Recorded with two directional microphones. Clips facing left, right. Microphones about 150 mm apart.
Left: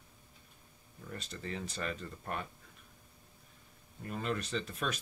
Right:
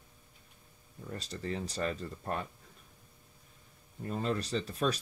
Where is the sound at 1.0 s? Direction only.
35° right (ahead or behind).